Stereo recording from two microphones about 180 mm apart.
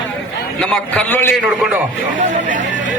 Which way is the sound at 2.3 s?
45° right (ahead or behind).